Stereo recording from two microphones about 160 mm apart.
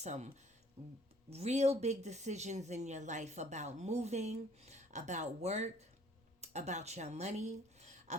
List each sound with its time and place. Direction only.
0.0 s speech: 45° right (ahead or behind)